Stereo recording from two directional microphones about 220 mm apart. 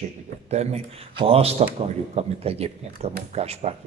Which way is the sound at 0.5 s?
30° right (ahead or behind).